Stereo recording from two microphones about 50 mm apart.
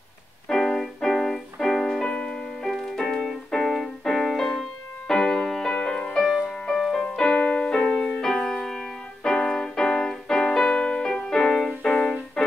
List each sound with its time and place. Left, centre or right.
0.5 s music: centre
2.0 s music: centre
2.6 s music: centre
6.7 s music: centre
7.2 s music: left
8.5 s keyboard: centre